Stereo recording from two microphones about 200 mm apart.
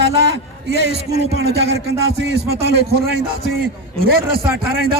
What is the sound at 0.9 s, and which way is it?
Music, 55° right (ahead or behind).